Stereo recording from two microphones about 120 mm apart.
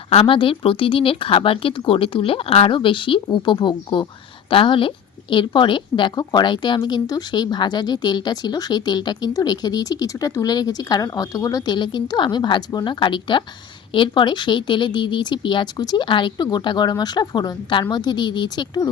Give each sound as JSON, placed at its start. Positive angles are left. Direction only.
{"t": 0.1, "sound": "a woman's voice", "side_deg": 50}